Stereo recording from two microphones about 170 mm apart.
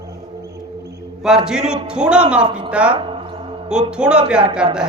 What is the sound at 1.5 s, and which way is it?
A man's voice, 5° right (ahead or behind).